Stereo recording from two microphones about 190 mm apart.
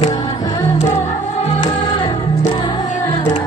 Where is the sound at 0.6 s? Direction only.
35° left (ahead or behind).